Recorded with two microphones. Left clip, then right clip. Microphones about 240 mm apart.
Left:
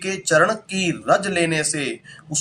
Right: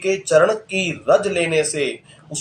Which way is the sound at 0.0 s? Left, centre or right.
Left.